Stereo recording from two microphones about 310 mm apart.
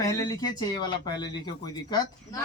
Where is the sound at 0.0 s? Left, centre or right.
Centre.